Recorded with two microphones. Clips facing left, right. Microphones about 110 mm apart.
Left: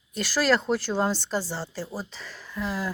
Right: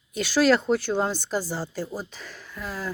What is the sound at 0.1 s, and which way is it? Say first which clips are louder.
Speech: right 3 dB; centre (ahead or behind).